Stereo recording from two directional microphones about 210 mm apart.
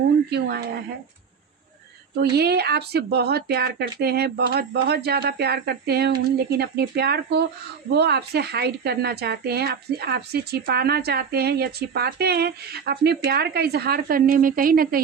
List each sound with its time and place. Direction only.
0.3 s a woman's voice: 50° right (ahead or behind)
2.3 s a woman's voice: 50° right (ahead or behind)